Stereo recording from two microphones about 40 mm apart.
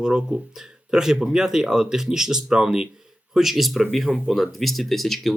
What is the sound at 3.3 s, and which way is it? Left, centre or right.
Speech, centre.